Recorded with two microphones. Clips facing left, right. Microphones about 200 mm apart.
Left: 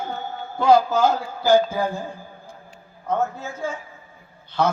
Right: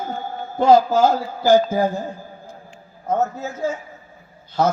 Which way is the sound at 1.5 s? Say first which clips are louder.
Right 3 dB; 45° right (ahead or behind).